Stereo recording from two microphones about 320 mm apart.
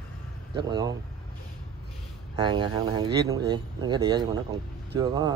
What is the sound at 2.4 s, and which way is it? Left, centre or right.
Speech, centre.